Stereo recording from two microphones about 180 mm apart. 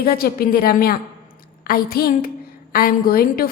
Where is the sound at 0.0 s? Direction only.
55° left (ahead or behind).